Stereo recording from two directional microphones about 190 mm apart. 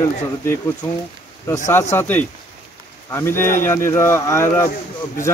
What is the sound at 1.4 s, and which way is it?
Speech, 15° left (ahead or behind).